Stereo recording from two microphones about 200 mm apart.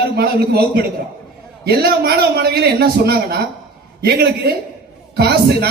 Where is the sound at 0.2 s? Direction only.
50° right (ahead or behind).